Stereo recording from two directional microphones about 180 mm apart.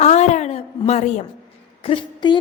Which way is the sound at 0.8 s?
35° left (ahead or behind).